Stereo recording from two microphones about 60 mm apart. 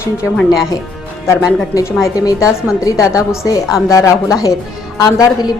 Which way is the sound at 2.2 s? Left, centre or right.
Left.